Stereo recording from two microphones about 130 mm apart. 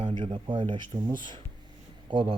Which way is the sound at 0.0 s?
45° right (ahead or behind).